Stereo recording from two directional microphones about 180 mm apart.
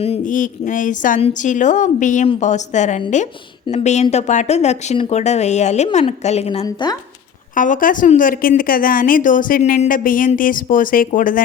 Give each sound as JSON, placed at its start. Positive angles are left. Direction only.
{"t": 0.0, "sound": "a woman's voice", "side_deg": 40}
{"t": 7.5, "sound": "a woman's voice", "side_deg": 45}